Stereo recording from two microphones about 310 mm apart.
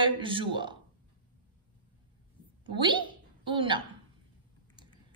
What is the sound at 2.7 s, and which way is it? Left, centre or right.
A woman's voice, centre.